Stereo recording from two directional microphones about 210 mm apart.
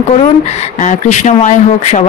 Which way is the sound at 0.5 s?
35° left (ahead or behind).